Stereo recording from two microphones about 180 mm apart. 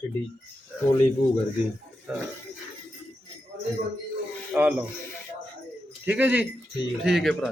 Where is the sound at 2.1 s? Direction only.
5° right (ahead or behind).